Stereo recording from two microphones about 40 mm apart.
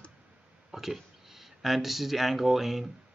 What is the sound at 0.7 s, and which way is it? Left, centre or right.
Speech, centre.